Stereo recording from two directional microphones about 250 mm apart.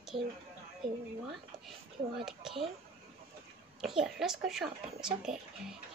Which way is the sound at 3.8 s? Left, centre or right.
Centre.